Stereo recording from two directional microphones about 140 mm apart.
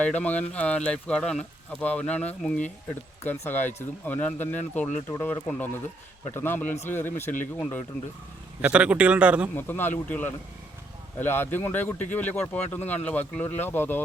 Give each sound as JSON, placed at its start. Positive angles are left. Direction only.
{"t": 0.0, "sound": "speech", "side_deg": 10}
{"t": 8.6, "sound": "speech", "side_deg": -10}
{"t": 9.6, "sound": "speech", "side_deg": 15}